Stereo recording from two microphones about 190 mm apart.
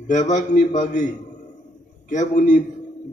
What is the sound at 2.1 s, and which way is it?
Speech, 40° left (ahead or behind).